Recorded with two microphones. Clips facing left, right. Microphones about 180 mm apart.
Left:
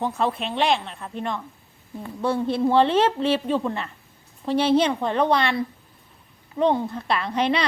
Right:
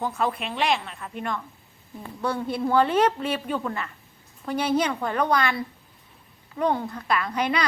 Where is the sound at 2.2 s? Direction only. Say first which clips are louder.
Left 4 dB; 25° left (ahead or behind).